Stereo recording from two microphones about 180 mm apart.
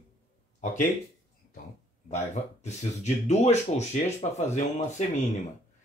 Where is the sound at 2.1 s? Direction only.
40° left (ahead or behind).